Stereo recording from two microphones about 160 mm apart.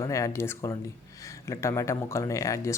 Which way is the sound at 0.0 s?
20° left (ahead or behind).